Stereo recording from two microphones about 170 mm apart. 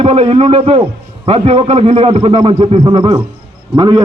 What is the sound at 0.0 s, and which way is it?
A man's voice, 35° right (ahead or behind).